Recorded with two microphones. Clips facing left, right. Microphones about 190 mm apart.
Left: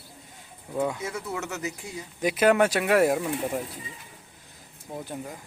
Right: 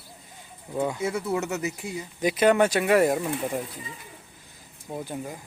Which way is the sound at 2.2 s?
Centre (ahead or behind).